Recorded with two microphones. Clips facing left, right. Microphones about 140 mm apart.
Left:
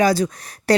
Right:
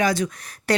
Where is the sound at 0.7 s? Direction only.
35° left (ahead or behind).